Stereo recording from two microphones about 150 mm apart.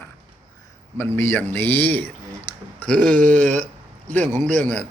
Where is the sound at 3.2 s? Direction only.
55° right (ahead or behind).